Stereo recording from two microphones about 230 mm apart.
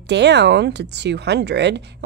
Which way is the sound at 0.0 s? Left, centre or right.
Right.